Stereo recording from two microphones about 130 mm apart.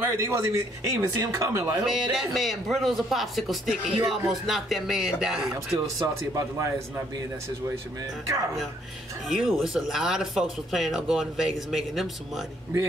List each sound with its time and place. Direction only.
0.1 s speech: 20° right (ahead or behind)
1.9 s speech: centre (ahead or behind)
5.9 s speech: 25° right (ahead or behind)
9.3 s speech: 5° right (ahead or behind)